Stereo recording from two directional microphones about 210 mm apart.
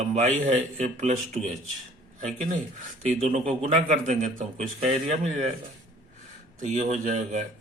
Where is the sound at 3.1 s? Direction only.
30° right (ahead or behind).